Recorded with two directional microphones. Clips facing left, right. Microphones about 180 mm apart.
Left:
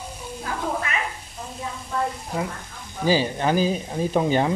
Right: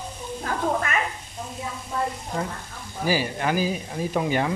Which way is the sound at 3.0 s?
25° left (ahead or behind).